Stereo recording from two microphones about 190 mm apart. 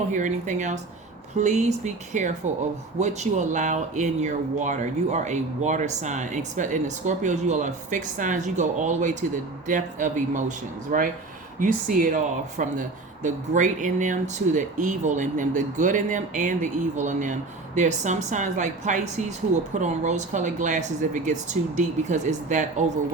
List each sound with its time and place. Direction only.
0.1 s speech: 40° right (ahead or behind)
11.6 s speech: 45° right (ahead or behind)